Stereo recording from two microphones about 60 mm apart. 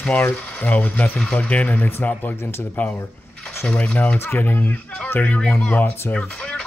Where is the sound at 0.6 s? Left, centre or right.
Left.